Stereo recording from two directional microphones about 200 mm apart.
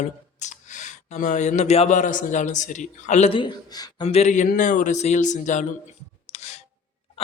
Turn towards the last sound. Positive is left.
turn(degrees=30)  # may be behind; listen again after turning